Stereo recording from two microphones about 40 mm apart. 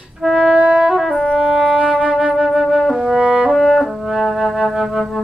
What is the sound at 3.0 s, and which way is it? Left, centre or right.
French horn, right.